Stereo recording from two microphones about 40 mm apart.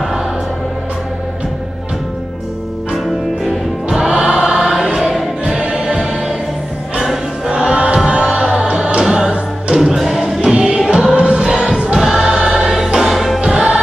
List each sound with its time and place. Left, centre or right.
4.1 s music: centre
7.4 s choir: right
8.1 s music: right
9.8 s music: centre
10.4 s music: right
12.2 s choir: centre
12.7 s music: centre